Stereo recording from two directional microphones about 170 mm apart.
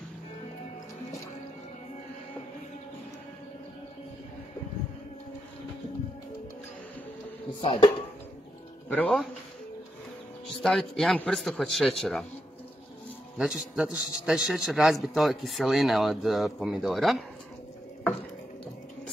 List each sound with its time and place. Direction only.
7.6 s speech: 30° left (ahead or behind)
8.8 s speech: 10° left (ahead or behind)
10.6 s a man's voice: centre (ahead or behind)
13.4 s a man's voice: centre (ahead or behind)